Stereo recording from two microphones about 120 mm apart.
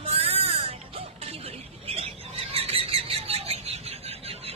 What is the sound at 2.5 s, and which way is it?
Bird, 55° right (ahead or behind).